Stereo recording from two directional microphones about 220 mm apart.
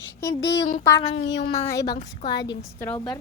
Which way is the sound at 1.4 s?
25° left (ahead or behind).